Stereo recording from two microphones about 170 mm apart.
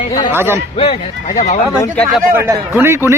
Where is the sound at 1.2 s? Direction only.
45° left (ahead or behind).